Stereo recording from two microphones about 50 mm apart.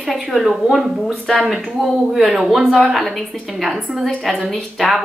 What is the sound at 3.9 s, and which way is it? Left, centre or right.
Speech, right.